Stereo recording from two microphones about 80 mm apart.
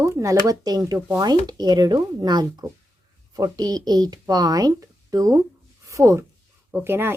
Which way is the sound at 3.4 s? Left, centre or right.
Right.